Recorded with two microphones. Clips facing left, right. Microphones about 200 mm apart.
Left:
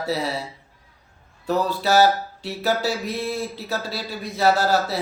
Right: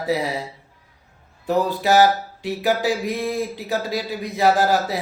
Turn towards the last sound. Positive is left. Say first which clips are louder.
# right 1 dB
turn(degrees=-15)  # may be behind; listen again after turning